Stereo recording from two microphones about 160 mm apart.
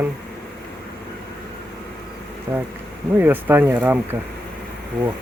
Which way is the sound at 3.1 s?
10° right (ahead or behind).